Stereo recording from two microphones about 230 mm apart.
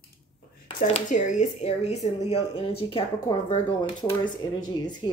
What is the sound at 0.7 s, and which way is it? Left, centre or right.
Speech, left.